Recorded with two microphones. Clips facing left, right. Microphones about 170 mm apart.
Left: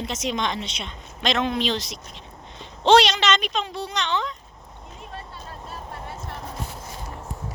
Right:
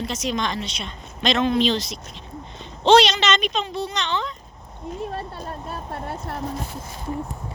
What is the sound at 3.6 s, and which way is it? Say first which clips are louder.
Speech: right 4 dB; 10° left (ahead or behind).